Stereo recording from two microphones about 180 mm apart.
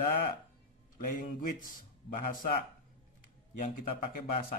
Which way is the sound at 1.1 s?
50° left (ahead or behind).